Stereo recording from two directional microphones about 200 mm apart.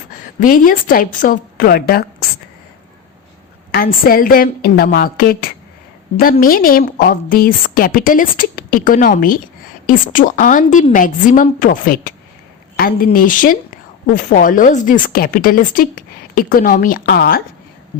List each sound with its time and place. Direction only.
0.2 s a woman's voice: 40° left (ahead or behind)
3.7 s a woman's voice: 45° left (ahead or behind)